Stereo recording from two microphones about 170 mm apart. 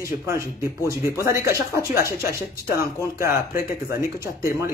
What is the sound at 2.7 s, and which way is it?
Speech, 15° right (ahead or behind).